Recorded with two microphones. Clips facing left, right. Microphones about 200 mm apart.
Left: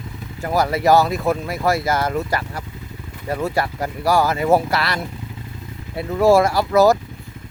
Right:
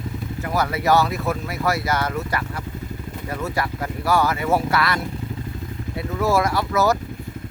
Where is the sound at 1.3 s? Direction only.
30° left (ahead or behind).